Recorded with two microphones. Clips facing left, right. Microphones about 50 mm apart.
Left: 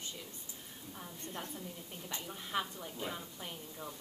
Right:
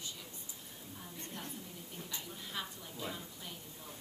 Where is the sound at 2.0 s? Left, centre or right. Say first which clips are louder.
Left 5 dB; left.